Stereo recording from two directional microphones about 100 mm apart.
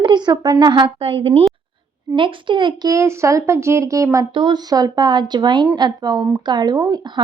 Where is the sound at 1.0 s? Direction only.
65° right (ahead or behind).